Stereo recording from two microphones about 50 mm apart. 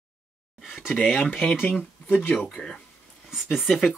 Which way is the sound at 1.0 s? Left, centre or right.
Centre.